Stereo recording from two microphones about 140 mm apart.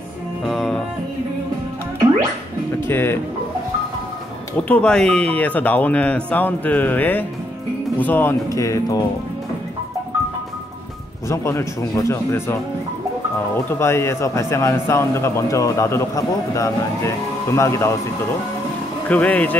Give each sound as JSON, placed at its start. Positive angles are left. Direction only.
{"t": 0.5, "sound": "music", "side_deg": 0}
{"t": 2.9, "sound": "speech", "side_deg": 15}
{"t": 4.6, "sound": "speech", "side_deg": 10}
{"t": 11.2, "sound": "speech", "side_deg": 20}
{"t": 13.7, "sound": "speech", "side_deg": 20}
{"t": 19.0, "sound": "speech", "side_deg": 10}